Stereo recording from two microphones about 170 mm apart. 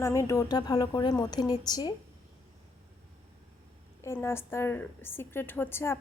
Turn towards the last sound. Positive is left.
turn(degrees=15)  # may be behind; listen again after turning